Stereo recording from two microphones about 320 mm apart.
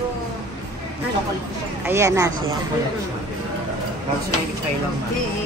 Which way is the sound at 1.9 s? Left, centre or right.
Centre.